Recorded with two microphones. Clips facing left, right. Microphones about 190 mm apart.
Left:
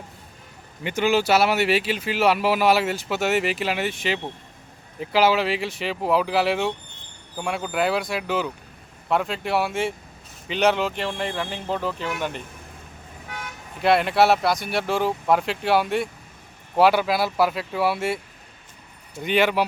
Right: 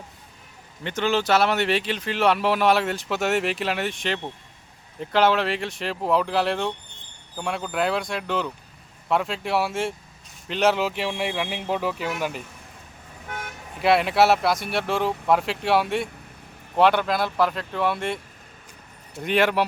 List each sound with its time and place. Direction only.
0.9 s speech: 10° left (ahead or behind); by 12.4 s 5° right (ahead or behind)
13.2 s toot: 50° right (ahead or behind)
13.8 s speech: centre (ahead or behind)
19.2 s speech: centre (ahead or behind)